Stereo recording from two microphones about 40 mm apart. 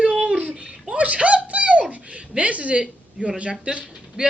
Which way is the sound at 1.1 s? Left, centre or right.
Right.